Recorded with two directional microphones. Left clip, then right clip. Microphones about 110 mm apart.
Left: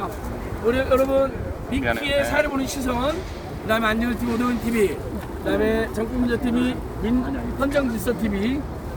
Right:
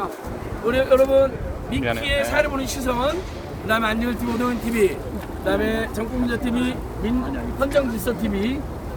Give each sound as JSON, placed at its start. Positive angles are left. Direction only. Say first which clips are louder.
{"t": 0.7, "sound": "speech", "louder": "right 3 dB", "side_deg": -15}